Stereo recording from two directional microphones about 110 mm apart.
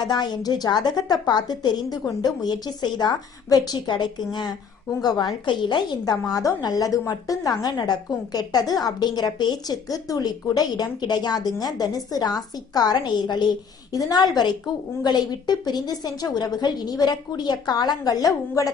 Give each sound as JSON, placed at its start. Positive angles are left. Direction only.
{"t": 0.0, "sound": "a woman's voice", "side_deg": 40}